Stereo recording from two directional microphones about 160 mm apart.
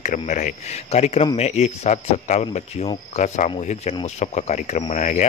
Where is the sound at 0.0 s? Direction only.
50° left (ahead or behind).